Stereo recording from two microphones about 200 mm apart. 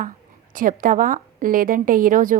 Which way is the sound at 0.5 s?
45° right (ahead or behind).